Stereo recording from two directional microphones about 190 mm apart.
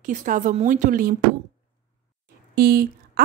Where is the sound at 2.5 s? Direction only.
55° right (ahead or behind).